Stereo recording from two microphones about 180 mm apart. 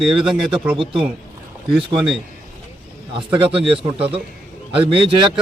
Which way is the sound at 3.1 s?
30° right (ahead or behind).